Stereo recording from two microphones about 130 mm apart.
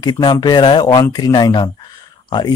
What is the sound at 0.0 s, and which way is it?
Speech, 35° left (ahead or behind).